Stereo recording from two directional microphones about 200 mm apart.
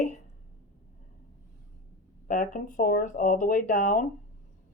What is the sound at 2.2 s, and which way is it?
Speech, 45° left (ahead or behind).